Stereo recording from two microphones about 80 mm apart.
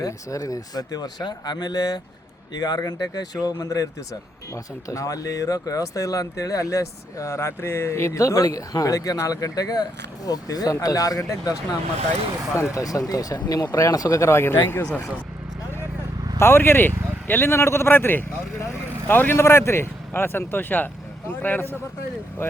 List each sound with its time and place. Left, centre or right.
0.0 s speech: left
16.4 s a man's voice: left